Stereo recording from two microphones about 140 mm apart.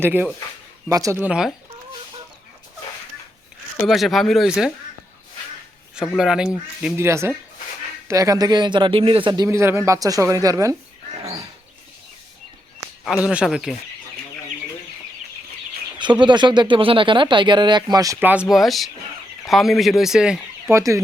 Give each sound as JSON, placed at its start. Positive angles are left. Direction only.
{"t": 0.0, "sound": "speech", "side_deg": -15}
{"t": 1.2, "sound": "speech", "side_deg": -5}
{"t": 3.8, "sound": "speech", "side_deg": 0}
{"t": 6.1, "sound": "speech", "side_deg": -5}
{"t": 6.9, "sound": "speech", "side_deg": -20}
{"t": 9.5, "sound": "speech", "side_deg": -20}
{"t": 13.2, "sound": "speech", "side_deg": -5}
{"t": 16.2, "sound": "speech", "side_deg": -35}
{"t": 18.2, "sound": "speech", "side_deg": -10}
{"t": 20.7, "sound": "speech", "side_deg": -20}